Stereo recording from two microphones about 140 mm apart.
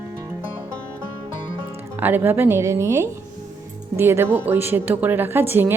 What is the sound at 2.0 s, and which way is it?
A woman's voice, 15° right (ahead or behind).